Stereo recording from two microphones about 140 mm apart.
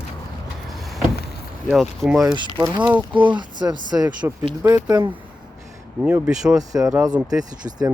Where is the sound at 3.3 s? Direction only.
35° right (ahead or behind).